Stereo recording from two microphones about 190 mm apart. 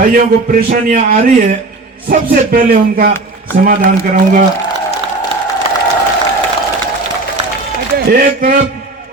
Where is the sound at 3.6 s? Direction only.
45° right (ahead or behind).